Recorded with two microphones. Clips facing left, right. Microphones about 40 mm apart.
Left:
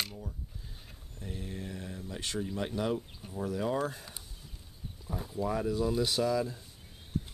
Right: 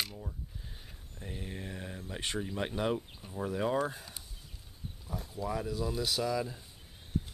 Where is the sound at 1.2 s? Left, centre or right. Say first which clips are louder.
Left 1 dB; right.